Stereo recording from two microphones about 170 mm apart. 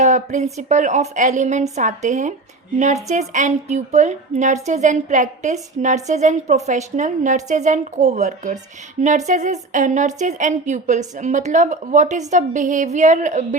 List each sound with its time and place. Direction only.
0.0 s a woman's voice: 45° right (ahead or behind)